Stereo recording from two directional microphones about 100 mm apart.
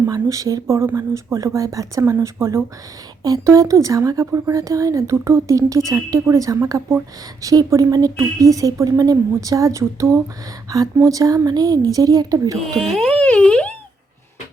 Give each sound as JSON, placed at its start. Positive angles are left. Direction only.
{"t": 0.1, "sound": "speech", "side_deg": -35}
{"t": 12.6, "sound": "music", "side_deg": 5}